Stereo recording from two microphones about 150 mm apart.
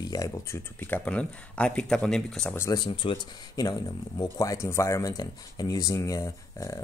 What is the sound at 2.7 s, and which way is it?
Speech, 30° left (ahead or behind).